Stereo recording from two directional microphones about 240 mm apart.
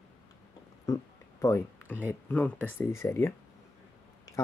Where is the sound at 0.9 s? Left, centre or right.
Centre.